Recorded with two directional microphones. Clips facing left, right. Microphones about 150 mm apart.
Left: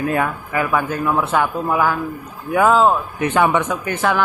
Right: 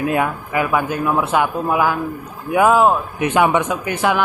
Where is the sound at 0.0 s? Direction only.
15° right (ahead or behind).